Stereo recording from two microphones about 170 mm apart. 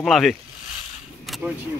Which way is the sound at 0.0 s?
Centre (ahead or behind).